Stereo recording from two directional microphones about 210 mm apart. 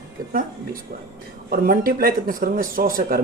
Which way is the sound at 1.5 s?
45° right (ahead or behind).